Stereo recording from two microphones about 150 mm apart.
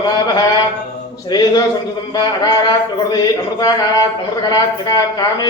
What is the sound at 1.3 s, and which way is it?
A man's voice, 25° left (ahead or behind).